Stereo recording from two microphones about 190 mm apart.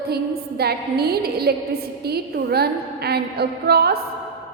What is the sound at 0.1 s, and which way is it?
A woman's voice, 55° right (ahead or behind).